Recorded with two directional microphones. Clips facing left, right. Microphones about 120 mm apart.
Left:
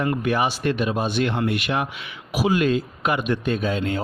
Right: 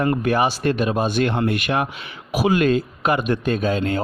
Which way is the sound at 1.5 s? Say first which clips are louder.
Right 2 dB; 50° right (ahead or behind).